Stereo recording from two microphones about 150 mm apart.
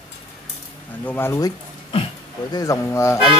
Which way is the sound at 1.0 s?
15° left (ahead or behind).